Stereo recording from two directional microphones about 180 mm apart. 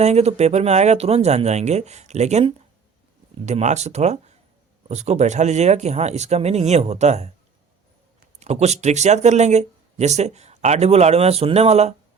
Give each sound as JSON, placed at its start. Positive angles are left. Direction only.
{"t": 0.0, "sound": "speech", "side_deg": -35}
{"t": 8.4, "sound": "speech", "side_deg": -40}